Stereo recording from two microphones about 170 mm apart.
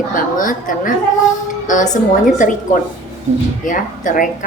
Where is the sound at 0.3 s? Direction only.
50° left (ahead or behind).